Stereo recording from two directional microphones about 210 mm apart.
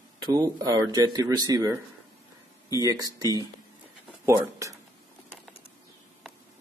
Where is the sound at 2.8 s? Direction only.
20° right (ahead or behind).